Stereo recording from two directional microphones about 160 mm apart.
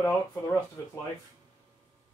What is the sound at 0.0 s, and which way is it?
Speech, 20° left (ahead or behind).